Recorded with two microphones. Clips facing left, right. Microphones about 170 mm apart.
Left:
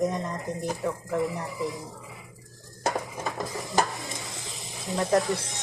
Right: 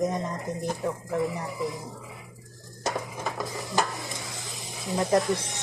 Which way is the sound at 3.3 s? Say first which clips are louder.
Even; 20° left (ahead or behind).